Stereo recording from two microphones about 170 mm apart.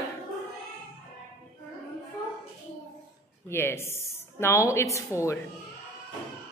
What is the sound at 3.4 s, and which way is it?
Speech, 15° left (ahead or behind).